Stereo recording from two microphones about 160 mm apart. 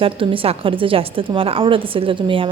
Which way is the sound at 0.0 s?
35° right (ahead or behind).